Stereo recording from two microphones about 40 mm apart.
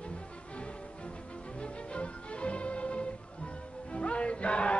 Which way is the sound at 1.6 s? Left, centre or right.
Left.